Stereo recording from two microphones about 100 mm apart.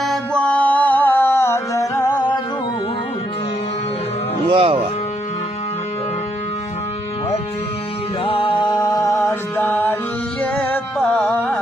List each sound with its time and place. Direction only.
0.0 s music: centre (ahead or behind)
0.4 s music: 15° left (ahead or behind); by 2.4 s 45° left (ahead or behind)
4.5 s speech: 70° right (ahead or behind)
8.2 s music: 60° left (ahead or behind); by 9.1 s 40° left (ahead or behind)
9.1 s mantra: 25° left (ahead or behind)
11.0 s music: 10° left (ahead or behind)